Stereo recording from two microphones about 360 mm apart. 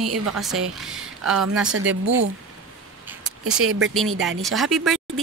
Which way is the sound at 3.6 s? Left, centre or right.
Right.